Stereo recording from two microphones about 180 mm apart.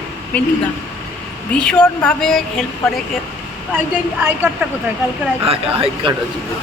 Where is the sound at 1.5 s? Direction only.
5° left (ahead or behind).